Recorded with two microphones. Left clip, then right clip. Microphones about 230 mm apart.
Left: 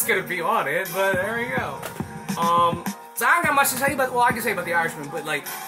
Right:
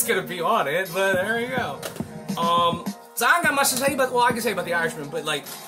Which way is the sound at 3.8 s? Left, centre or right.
Centre.